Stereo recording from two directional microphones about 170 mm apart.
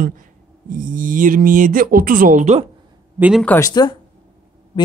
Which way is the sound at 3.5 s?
20° left (ahead or behind).